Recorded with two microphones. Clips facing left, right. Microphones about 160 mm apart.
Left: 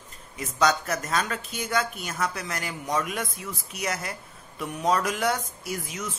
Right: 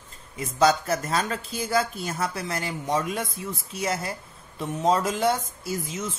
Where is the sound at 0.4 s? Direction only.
30° right (ahead or behind).